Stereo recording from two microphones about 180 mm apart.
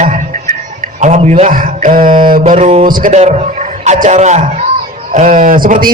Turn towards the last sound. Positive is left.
turn(degrees=-50)  # may be behind; listen again after turning